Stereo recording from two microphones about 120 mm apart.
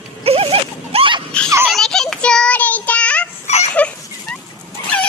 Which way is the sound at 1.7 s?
5° left (ahead or behind).